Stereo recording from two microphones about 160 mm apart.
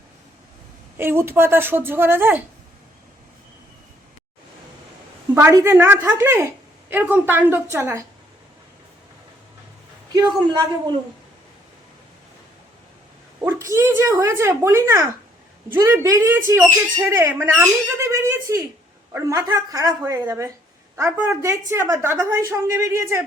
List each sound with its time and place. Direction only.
0.9 s speech: 15° right (ahead or behind)
5.3 s speech: 15° right (ahead or behind)
10.5 s a woman's voice: 30° right (ahead or behind)
13.4 s a woman's voice: 15° right (ahead or behind)